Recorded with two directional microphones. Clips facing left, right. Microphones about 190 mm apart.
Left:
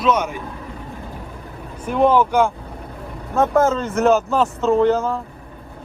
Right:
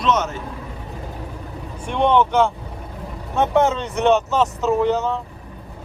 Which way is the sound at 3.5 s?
Centre (ahead or behind).